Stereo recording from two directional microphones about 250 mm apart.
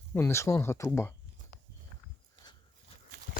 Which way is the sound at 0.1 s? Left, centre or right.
Centre.